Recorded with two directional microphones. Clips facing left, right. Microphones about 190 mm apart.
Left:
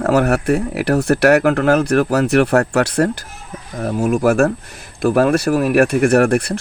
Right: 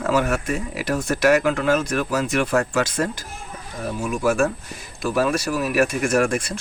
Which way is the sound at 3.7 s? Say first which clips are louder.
Left 8 dB; 55° left (ahead or behind).